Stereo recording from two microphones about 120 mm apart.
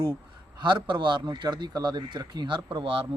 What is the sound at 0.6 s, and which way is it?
A man's voice, 40° right (ahead or behind).